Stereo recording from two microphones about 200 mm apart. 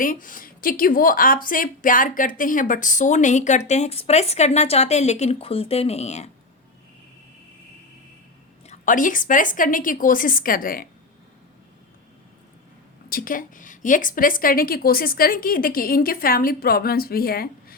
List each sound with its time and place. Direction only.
0.0 s a woman's voice: 45° left (ahead or behind)
8.6 s a woman's voice: 35° left (ahead or behind)
13.1 s a woman's voice: 45° left (ahead or behind)